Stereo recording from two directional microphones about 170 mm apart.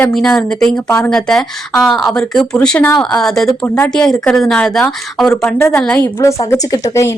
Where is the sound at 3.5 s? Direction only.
15° left (ahead or behind).